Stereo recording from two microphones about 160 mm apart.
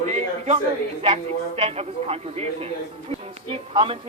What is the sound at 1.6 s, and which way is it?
Speech, 40° right (ahead or behind).